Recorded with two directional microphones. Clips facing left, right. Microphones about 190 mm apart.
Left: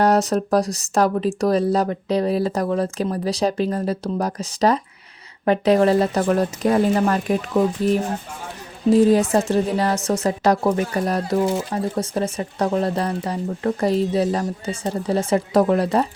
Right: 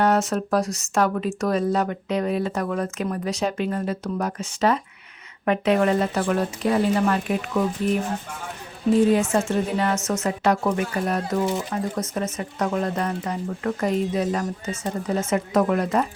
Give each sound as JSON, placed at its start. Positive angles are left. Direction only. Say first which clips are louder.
{"t": 0.0, "sound": "speech", "louder": "left 3 dB", "side_deg": 35}